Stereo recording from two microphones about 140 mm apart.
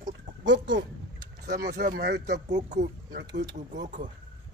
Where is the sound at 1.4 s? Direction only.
65° right (ahead or behind).